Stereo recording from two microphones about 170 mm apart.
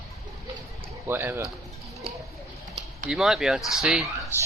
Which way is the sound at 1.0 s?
15° right (ahead or behind).